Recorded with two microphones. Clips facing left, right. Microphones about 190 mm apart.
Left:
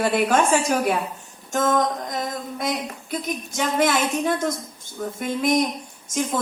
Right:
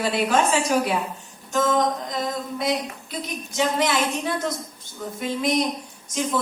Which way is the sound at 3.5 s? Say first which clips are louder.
Left 1 dB; 50° left (ahead or behind).